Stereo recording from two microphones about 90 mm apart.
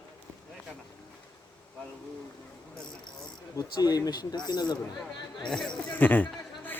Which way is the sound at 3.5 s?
45° left (ahead or behind).